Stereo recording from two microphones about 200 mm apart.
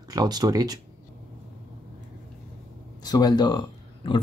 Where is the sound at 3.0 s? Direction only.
20° left (ahead or behind).